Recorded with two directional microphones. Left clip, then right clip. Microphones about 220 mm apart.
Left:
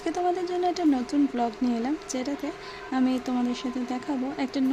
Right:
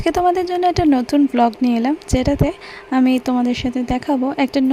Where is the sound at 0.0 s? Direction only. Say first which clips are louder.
Right 11 dB; 40° right (ahead or behind).